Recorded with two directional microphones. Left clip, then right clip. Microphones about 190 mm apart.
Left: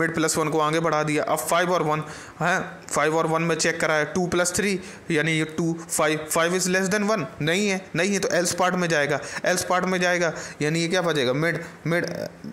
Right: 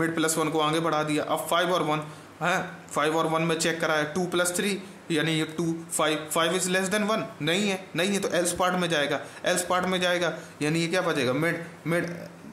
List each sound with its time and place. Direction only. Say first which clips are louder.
0.0 s a man's voice: left 3 dB; 35° left (ahead or behind)